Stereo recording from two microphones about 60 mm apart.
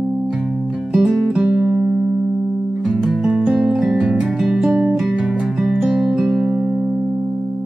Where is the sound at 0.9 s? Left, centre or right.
Centre.